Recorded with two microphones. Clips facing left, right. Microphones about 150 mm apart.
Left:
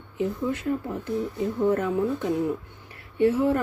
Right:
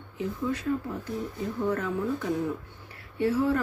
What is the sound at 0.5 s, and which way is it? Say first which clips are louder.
A woman's voice: left 2 dB; 25° left (ahead or behind).